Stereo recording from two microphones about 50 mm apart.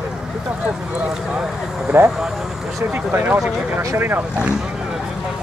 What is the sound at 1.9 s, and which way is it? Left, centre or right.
Speech, right.